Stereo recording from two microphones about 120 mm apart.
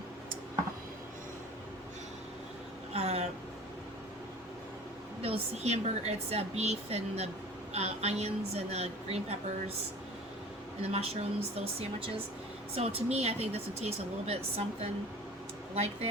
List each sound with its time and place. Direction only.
2.9 s vehicle: 60° right (ahead or behind)
5.2 s a woman's voice: 60° right (ahead or behind)
10.9 s a woman's voice: 55° right (ahead or behind)
15.7 s a woman's voice: 60° right (ahead or behind)